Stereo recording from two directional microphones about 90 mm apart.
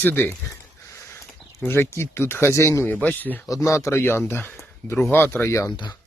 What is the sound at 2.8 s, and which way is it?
Speech, 20° left (ahead or behind).